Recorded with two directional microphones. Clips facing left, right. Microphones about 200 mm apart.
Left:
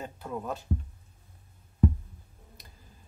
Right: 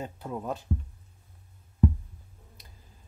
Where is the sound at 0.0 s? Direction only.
15° right (ahead or behind).